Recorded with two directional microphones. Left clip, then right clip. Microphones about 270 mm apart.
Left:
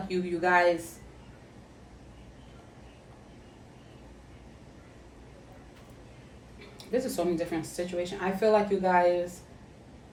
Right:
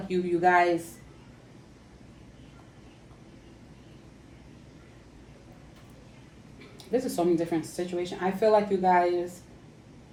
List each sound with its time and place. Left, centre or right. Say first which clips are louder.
0.1 s speech: right 3 dB; centre
6.7 s speech: right 2 dB; centre